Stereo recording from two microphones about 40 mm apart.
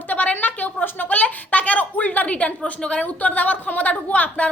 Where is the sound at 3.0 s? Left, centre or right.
Left.